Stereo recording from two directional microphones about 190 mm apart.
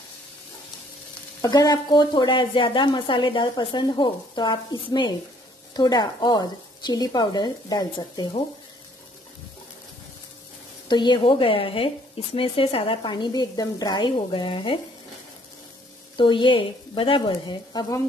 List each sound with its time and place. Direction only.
1.4 s a woman's voice: 20° left (ahead or behind)
10.9 s a woman's voice: 25° left (ahead or behind)
16.2 s a woman's voice: 25° left (ahead or behind)